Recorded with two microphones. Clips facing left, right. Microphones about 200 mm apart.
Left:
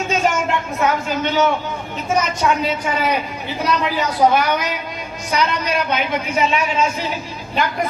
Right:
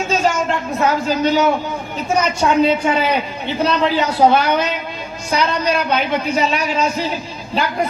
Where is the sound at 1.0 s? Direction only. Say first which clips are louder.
Right 4 dB; 35° right (ahead or behind).